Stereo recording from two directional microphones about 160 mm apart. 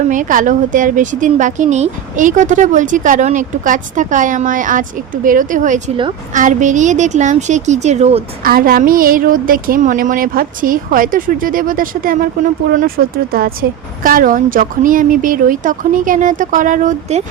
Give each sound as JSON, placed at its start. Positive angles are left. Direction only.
{"t": 0.1, "sound": "a woman's voice", "side_deg": -55}
{"t": 8.4, "sound": "a woman's voice", "side_deg": -65}